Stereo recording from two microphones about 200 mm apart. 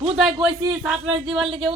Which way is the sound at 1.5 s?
25° right (ahead or behind).